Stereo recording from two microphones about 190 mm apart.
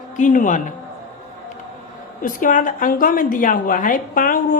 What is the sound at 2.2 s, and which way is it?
A woman's voice, 45° left (ahead or behind).